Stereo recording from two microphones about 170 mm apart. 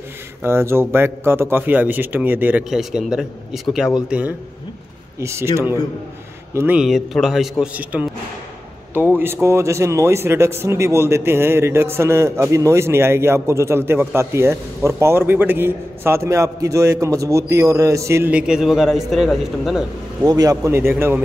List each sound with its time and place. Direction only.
0.4 s speech: 15° right (ahead or behind)
5.2 s a man's voice: 15° right (ahead or behind)
20.2 s speech: 20° right (ahead or behind)